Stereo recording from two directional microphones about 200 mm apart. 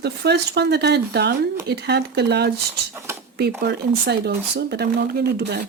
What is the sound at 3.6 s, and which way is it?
Speech, 55° right (ahead or behind).